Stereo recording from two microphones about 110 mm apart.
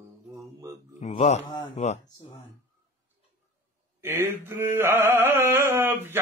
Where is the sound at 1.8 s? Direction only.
90° left.